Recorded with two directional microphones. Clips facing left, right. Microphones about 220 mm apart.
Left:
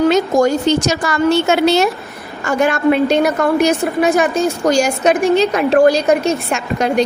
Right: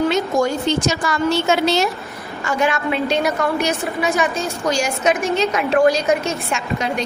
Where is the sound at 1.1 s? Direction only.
60° left (ahead or behind).